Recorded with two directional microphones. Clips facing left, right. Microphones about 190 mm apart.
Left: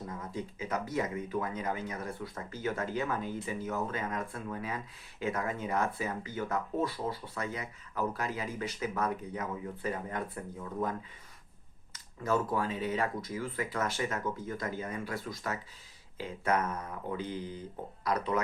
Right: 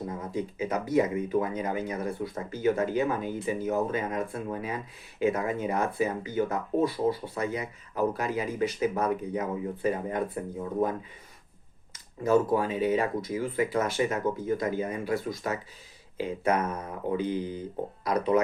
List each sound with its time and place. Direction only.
0.3 s speech: 15° right (ahead or behind)
11.9 s a sound: 15° right (ahead or behind)
12.5 s speech: 15° right (ahead or behind)